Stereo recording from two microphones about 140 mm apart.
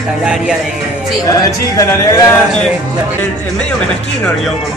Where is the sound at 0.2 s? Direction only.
5° right (ahead or behind).